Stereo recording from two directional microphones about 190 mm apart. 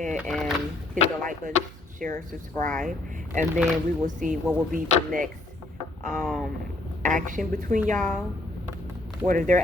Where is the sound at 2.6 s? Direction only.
45° right (ahead or behind).